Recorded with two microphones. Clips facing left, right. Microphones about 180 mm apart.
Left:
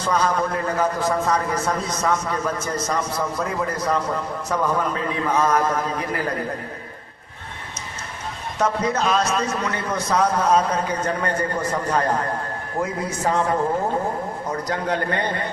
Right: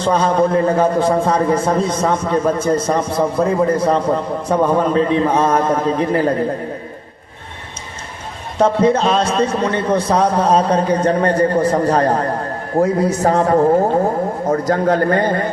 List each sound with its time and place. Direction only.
0.0 s a man's voice: 30° right (ahead or behind)
8.5 s a man's voice: 30° right (ahead or behind); by 15.4 s 45° right (ahead or behind)